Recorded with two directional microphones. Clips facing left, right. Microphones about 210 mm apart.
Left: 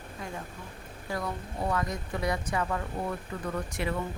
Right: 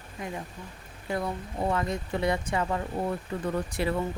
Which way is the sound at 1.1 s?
25° right (ahead or behind).